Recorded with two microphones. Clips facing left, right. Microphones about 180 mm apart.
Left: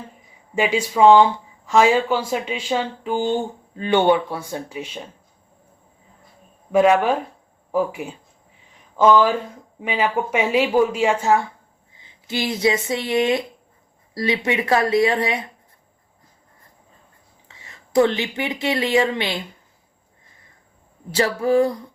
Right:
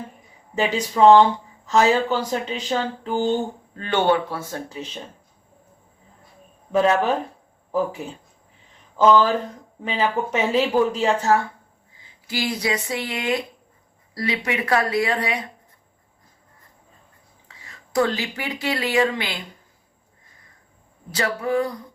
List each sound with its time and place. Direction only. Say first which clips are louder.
0.5 s speech: left 2 dB; 10° left (ahead or behind)
6.7 s speech: left 3 dB; 15° left (ahead or behind)
17.6 s speech: left 5 dB; 25° left (ahead or behind)
21.1 s speech: left 5 dB; 30° left (ahead or behind)